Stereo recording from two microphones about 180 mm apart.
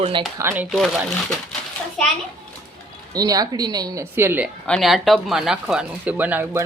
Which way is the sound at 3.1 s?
20° right (ahead or behind).